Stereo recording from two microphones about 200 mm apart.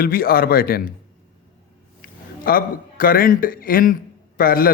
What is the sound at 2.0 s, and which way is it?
A man's voice, 45° left (ahead or behind).